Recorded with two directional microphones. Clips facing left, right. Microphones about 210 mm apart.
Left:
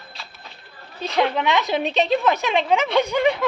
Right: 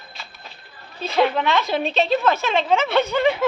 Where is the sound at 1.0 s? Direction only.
5° right (ahead or behind).